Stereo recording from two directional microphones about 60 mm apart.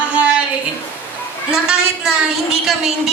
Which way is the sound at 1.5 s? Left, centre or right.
Centre.